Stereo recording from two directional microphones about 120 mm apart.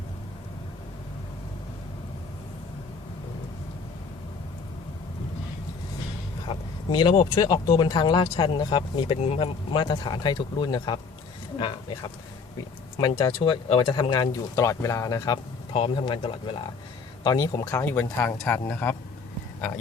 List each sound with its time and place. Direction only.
6.5 s speech: 40° left (ahead or behind)
9.7 s speech: 40° left (ahead or behind)
13.0 s speech: 40° left (ahead or behind)
15.7 s speech: 50° left (ahead or behind)
17.2 s speech: 35° left (ahead or behind)
17.7 s speech: 15° left (ahead or behind)